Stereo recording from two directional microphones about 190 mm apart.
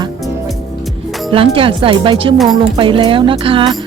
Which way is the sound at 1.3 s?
30° right (ahead or behind).